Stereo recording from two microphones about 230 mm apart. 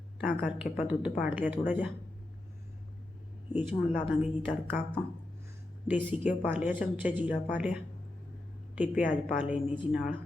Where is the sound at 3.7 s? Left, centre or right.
Left.